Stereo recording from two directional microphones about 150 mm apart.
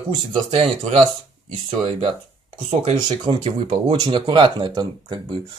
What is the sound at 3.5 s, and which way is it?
Speech, 45° right (ahead or behind).